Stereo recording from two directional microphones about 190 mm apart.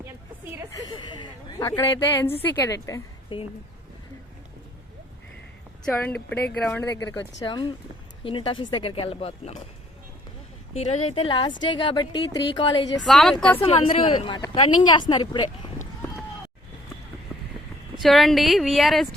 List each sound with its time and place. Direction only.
0.9 s a sound: 25° left (ahead or behind)
2.4 s a woman's voice: 15° left (ahead or behind)
5.8 s a woman's voice: 5° left (ahead or behind); by 9.6 s 35° left (ahead or behind)
10.8 s speech: 35° left (ahead or behind)
13.1 s a woman's voice: centre (ahead or behind)
13.6 s speech: 30° left (ahead or behind)
17.9 s a woman's voice: centre (ahead or behind)